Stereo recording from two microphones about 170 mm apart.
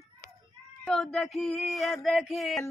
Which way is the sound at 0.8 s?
5° left (ahead or behind).